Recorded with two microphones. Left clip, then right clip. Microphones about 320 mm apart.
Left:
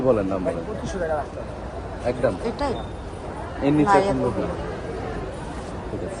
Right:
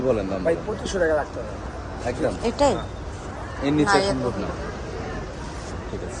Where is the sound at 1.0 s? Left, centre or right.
Right.